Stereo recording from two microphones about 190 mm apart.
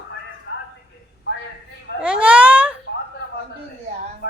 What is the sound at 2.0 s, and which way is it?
Baby cry, 5° right (ahead or behind).